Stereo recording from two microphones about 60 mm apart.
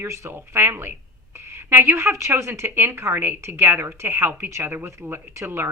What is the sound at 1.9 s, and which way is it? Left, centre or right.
Speech, right.